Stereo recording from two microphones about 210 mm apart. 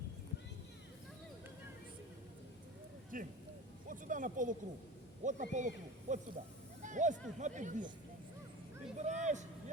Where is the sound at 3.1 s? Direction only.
40° right (ahead or behind).